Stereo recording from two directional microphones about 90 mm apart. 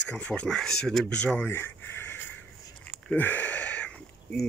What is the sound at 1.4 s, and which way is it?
Speech, 25° left (ahead or behind).